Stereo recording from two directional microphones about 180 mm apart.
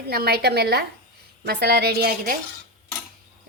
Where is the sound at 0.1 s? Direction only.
60° right (ahead or behind).